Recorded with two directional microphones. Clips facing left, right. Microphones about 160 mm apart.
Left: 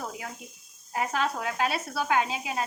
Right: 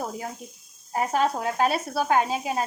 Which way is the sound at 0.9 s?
40° right (ahead or behind).